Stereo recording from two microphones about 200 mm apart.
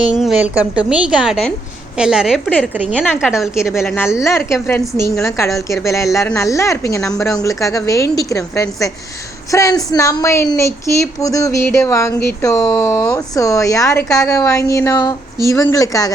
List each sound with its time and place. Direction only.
0.0 s a woman's voice: 5° right (ahead or behind)
2.7 s a woman's voice: 5° right (ahead or behind)
3.8 s a woman's voice: 10° left (ahead or behind)